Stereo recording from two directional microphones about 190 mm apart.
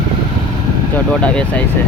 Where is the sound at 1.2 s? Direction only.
5° left (ahead or behind).